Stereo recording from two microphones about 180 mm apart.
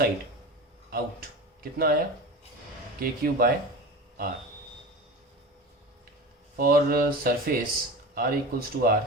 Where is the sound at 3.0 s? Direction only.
55° right (ahead or behind).